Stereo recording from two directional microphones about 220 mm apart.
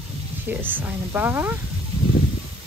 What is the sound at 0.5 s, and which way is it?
Speech, 10° right (ahead or behind).